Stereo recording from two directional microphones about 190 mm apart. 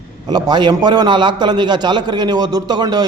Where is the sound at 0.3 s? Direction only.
20° right (ahead or behind).